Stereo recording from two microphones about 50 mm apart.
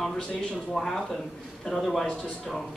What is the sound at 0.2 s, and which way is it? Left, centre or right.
Speech, left.